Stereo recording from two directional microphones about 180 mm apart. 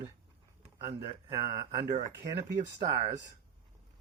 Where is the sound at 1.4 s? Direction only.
25° right (ahead or behind).